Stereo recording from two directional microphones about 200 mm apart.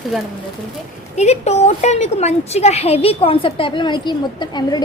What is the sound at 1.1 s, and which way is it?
A woman's voice, 35° left (ahead or behind).